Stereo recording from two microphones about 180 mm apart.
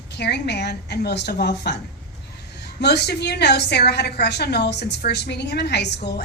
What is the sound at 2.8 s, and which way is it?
A woman's voice, 65° left (ahead or behind).